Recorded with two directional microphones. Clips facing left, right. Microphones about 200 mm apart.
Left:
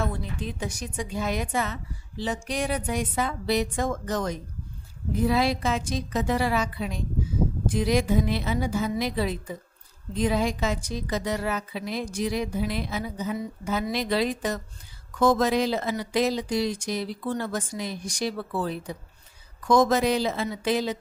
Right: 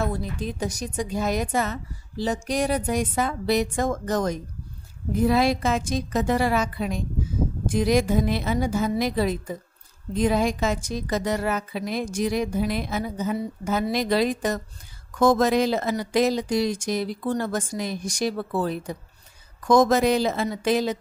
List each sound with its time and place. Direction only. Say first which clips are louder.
0.0 s a woman's voice: right 3 dB; 40° right (ahead or behind)